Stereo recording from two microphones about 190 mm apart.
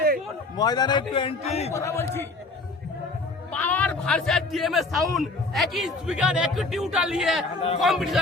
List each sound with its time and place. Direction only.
0.5 s a man's voice: 20° left (ahead or behind)
1.7 s a man's voice: 15° left (ahead or behind)
3.5 s a man's voice: 10° left (ahead or behind)